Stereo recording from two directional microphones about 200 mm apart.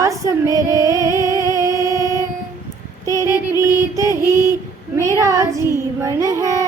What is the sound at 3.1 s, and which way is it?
Female singing, 15° right (ahead or behind).